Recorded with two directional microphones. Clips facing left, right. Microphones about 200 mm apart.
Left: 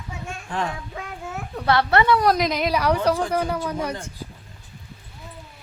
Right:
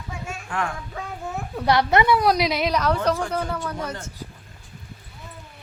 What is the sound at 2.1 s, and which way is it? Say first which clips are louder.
Speech: even; centre (ahead or behind).